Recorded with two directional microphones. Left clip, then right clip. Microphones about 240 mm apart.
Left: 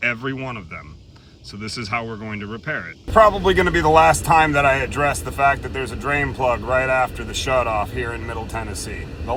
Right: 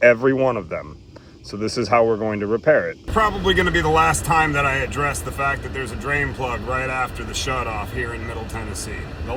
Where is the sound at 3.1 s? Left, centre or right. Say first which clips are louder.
Left 5 dB; centre.